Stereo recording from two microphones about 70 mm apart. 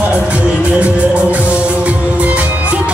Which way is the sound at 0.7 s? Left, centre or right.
Right.